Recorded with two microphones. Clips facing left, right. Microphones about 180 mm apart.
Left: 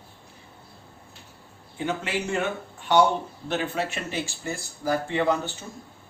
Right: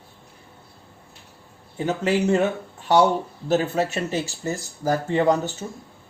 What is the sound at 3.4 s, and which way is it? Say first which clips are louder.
Speech: right 7 dB; 40° right (ahead or behind).